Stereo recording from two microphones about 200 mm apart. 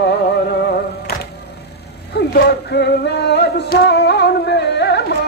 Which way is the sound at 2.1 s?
55° left (ahead or behind).